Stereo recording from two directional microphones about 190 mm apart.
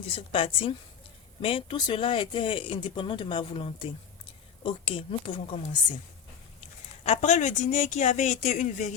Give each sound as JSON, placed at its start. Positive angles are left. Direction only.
{"t": 0.2, "sound": "speech", "side_deg": 30}
{"t": 6.6, "sound": "speech", "side_deg": 35}